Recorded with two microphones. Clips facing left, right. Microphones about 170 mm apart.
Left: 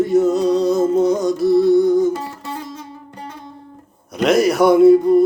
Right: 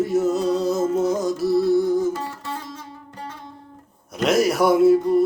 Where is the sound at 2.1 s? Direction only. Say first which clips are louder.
Left 3 dB; 15° left (ahead or behind).